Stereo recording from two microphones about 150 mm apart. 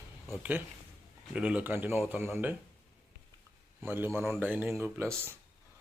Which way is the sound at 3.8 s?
15° right (ahead or behind).